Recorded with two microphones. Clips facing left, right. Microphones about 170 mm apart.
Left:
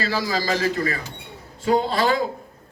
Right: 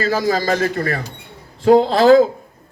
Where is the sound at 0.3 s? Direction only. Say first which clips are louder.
Right 5 dB; 55° right (ahead or behind).